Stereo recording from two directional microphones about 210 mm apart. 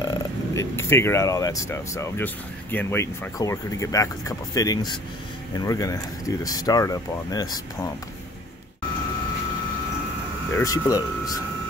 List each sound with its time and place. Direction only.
0.1 s speech: 15° left (ahead or behind)
10.5 s speech: 15° left (ahead or behind)